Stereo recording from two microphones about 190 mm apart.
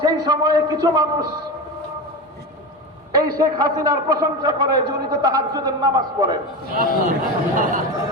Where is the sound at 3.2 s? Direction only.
20° right (ahead or behind).